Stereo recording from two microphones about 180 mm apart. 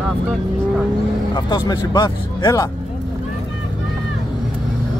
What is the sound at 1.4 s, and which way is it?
Speech, 25° left (ahead or behind).